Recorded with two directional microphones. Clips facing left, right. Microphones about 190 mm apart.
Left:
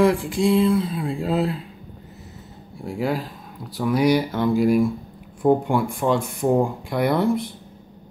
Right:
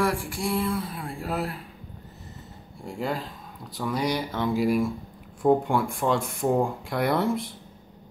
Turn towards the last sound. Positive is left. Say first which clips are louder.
# left 4 dB
turn(degrees=0)  # may be behind; listen again after turning